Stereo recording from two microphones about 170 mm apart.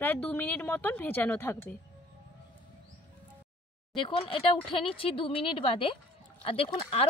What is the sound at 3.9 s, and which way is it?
Speech, 30° left (ahead or behind).